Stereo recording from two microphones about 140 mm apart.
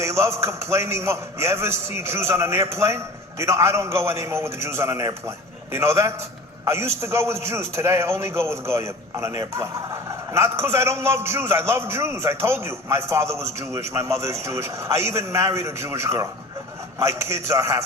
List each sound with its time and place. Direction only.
0.0 s a man's voice: 20° right (ahead or behind)